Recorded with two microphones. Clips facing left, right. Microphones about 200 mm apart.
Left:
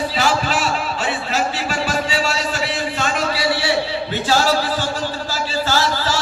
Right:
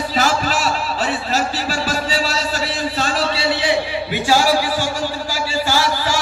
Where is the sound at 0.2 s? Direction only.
40° right (ahead or behind); by 4.6 s 10° right (ahead or behind).